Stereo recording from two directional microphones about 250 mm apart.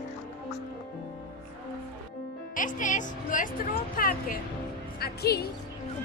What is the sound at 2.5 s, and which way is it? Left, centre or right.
A woman's voice, left.